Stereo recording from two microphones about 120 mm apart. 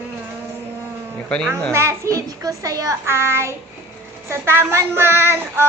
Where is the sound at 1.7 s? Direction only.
25° right (ahead or behind).